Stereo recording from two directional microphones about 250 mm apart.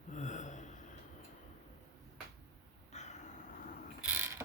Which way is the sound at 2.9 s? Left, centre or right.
Left.